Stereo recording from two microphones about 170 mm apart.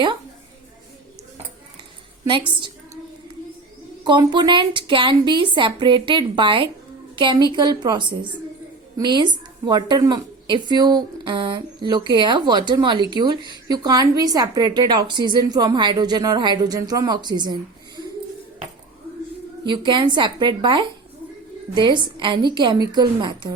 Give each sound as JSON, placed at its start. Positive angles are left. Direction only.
{"t": 2.5, "sound": "a woman's voice", "side_deg": -30}
{"t": 4.0, "sound": "a woman's voice", "side_deg": -25}
{"t": 19.6, "sound": "a woman's voice", "side_deg": -25}